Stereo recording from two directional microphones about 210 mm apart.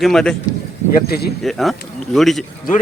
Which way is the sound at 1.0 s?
50° left (ahead or behind).